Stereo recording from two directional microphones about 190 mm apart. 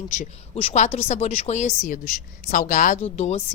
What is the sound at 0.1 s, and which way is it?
Speech, 35° left (ahead or behind).